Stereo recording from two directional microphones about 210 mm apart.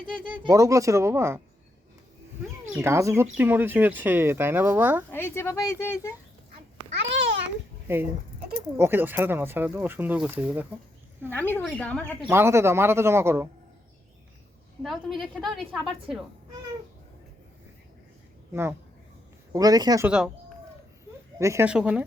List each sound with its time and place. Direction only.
0.4 s speech: 15° right (ahead or behind)
2.7 s speech: 15° right (ahead or behind)
5.1 s speech: 10° left (ahead or behind)
7.2 s babbling: 55° right (ahead or behind)
7.9 s speech: 10° right (ahead or behind)
11.3 s speech: 10° left (ahead or behind)
12.3 s speech: 10° right (ahead or behind)
14.8 s a woman's voice: centre (ahead or behind)
19.5 s speech: 20° right (ahead or behind)
20.1 s a woman's voice: 5° right (ahead or behind)
21.3 s speech: 15° right (ahead or behind)